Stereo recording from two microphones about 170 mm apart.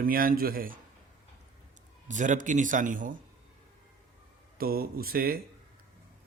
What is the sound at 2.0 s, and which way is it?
A man's voice, 45° right (ahead or behind).